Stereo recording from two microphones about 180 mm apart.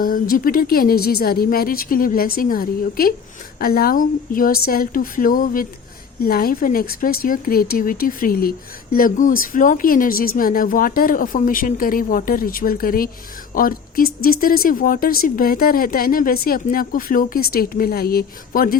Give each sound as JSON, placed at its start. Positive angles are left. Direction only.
{"t": 0.0, "sound": "speech", "side_deg": 50}